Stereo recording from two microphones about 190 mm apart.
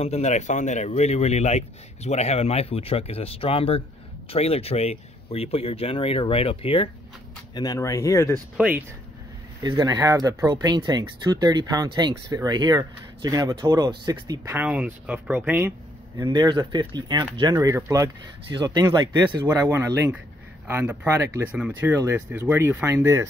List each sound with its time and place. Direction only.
0.0 s speech: 35° left (ahead or behind)
7.5 s speech: 20° left (ahead or behind)
8.5 s speech: 10° right (ahead or behind)
9.6 s speech: 20° right (ahead or behind)
16.2 s speech: 25° right (ahead or behind)